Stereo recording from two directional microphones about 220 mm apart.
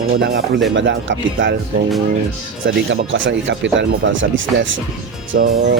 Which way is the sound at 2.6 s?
60° right (ahead or behind).